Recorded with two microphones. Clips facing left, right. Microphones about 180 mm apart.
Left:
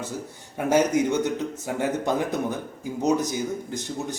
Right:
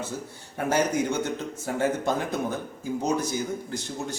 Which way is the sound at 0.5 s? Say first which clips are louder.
Left 4 dB; 15° left (ahead or behind).